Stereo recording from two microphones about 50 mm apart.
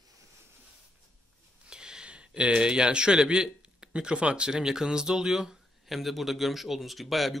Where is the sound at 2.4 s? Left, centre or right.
Centre.